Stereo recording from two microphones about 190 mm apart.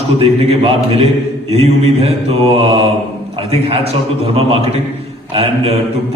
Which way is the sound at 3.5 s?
30° right (ahead or behind).